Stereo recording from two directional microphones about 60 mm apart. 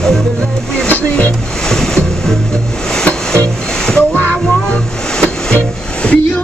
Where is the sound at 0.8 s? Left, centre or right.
Left.